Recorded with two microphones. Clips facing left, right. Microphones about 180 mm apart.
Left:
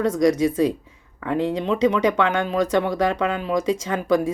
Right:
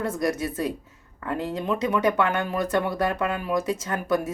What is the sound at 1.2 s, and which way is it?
Speech, 5° right (ahead or behind).